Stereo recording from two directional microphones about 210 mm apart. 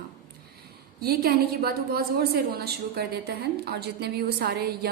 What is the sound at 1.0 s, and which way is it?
A woman's voice, 45° right (ahead or behind).